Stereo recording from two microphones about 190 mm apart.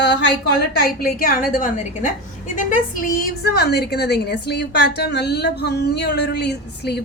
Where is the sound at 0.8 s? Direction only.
50° left (ahead or behind).